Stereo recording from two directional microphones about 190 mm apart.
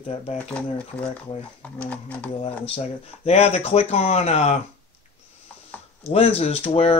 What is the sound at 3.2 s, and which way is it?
Speech, 35° left (ahead or behind).